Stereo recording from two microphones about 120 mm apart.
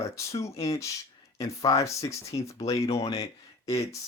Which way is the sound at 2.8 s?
60° left (ahead or behind).